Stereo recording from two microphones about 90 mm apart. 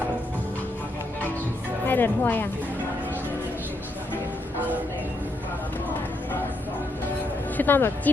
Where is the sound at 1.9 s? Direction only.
20° left (ahead or behind).